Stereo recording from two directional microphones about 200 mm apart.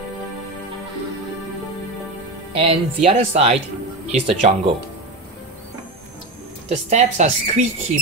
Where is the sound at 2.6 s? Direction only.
30° right (ahead or behind).